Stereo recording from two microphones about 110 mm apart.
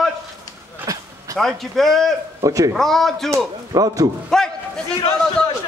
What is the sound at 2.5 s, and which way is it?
Speech, 30° right (ahead or behind).